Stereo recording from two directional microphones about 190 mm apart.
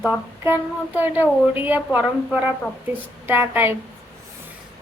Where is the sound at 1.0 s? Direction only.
10° right (ahead or behind).